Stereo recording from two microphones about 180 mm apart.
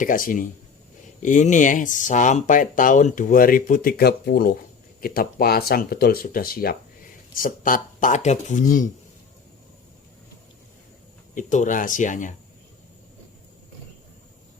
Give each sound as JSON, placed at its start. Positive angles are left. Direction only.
{"t": 0.0, "sound": "speech", "side_deg": 50}
{"t": 11.3, "sound": "speech", "side_deg": 45}